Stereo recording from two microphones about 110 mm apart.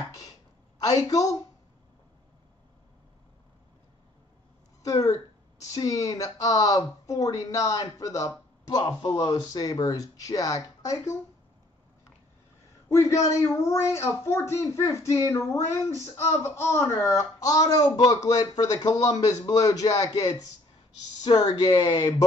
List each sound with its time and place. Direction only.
0.7 s speech: 35° left (ahead or behind)
4.8 s speech: 30° left (ahead or behind)
13.3 s speech: 25° left (ahead or behind)